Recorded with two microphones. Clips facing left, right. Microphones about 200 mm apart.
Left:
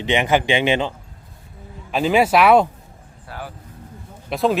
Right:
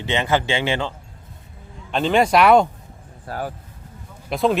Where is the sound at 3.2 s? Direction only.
45° right (ahead or behind).